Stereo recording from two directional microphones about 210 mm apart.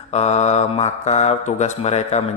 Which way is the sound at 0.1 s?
30° left (ahead or behind).